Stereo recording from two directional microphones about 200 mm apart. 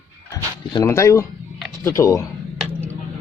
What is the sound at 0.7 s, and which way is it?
Speech, 15° left (ahead or behind).